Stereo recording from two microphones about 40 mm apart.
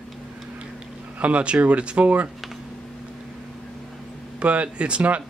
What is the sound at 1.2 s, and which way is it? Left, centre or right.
Speech, right.